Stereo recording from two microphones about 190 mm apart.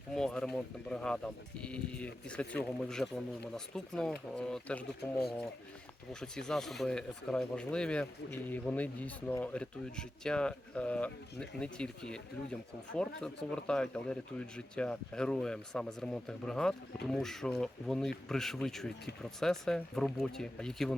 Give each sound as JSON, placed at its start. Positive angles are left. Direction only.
{"t": 0.1, "sound": "speech", "side_deg": 5}
{"t": 6.1, "sound": "speech", "side_deg": 5}